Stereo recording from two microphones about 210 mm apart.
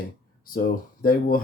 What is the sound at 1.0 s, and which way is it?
Speech, 40° left (ahead or behind).